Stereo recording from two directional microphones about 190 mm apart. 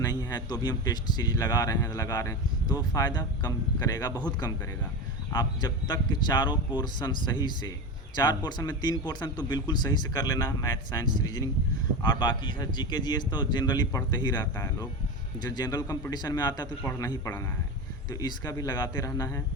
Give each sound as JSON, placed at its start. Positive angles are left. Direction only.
{"t": 0.0, "sound": "a man's voice", "side_deg": 20}